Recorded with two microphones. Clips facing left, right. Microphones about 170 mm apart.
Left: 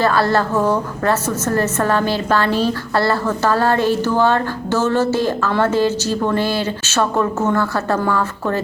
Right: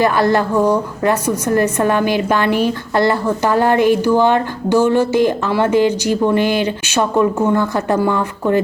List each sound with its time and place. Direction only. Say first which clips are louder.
0.0 s a woman's voice: right 2 dB; 15° right (ahead or behind)